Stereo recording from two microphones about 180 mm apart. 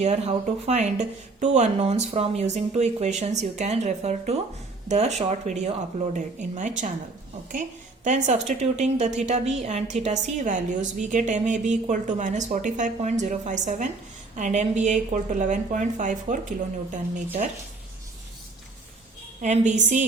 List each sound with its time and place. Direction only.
0.0 s speech: 40° right (ahead or behind)
8.0 s a woman's voice: 40° right (ahead or behind)
19.4 s a woman's voice: 40° right (ahead or behind)